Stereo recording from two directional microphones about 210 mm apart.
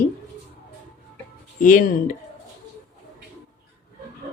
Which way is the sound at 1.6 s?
40° left (ahead or behind).